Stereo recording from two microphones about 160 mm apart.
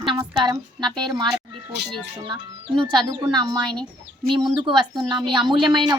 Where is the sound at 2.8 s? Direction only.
30° right (ahead or behind).